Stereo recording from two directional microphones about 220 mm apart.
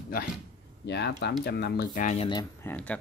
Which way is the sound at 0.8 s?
50° left (ahead or behind).